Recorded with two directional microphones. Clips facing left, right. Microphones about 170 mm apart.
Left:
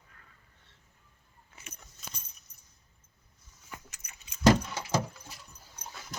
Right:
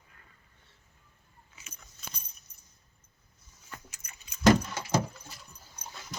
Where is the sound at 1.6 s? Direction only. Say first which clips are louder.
Left 5 dB; 55° left (ahead or behind).